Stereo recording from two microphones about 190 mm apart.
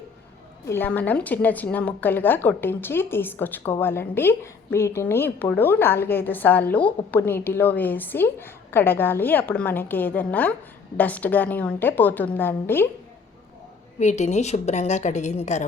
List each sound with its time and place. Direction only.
0.6 s a woman's voice: 10° left (ahead or behind)
14.0 s a woman's voice: 40° left (ahead or behind)